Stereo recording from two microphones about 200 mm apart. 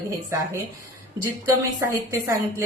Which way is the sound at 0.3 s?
15° right (ahead or behind).